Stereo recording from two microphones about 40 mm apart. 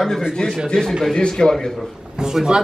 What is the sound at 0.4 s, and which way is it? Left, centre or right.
Speech, left.